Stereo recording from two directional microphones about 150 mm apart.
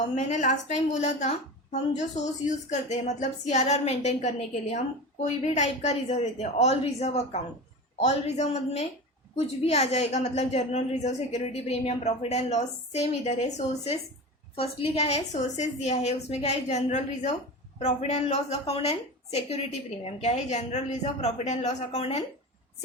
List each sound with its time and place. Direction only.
0.2 s a woman's voice: 55° left (ahead or behind)